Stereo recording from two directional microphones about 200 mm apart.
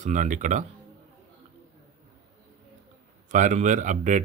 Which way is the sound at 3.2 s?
40° right (ahead or behind).